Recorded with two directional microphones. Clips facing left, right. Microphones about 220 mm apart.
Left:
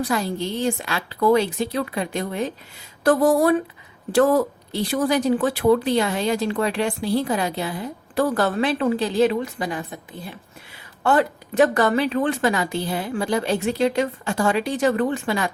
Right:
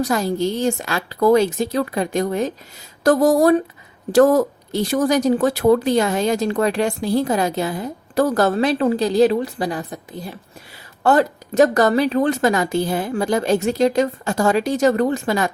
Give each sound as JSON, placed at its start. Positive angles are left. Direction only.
{"t": 0.0, "sound": "speech", "side_deg": -45}